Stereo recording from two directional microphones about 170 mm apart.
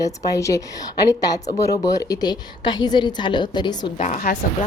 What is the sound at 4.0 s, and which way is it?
Speech, 50° left (ahead or behind).